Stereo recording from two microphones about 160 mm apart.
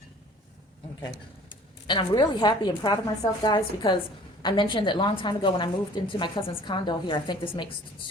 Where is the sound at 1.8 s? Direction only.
30° left (ahead or behind).